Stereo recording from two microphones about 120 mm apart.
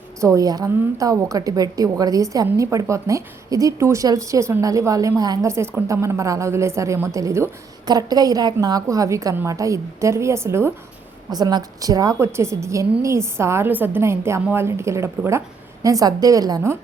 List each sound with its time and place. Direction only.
0.2 s a woman's voice: 25° right (ahead or behind)
11.3 s a woman's voice: 35° right (ahead or behind)